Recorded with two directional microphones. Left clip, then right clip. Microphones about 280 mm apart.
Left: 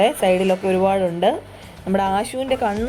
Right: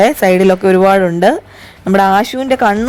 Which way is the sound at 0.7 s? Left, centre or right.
Right.